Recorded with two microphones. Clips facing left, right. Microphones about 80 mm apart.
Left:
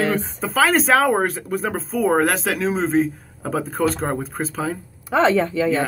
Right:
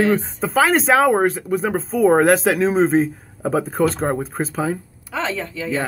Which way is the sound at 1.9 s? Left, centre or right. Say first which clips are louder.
Right 5 dB; right.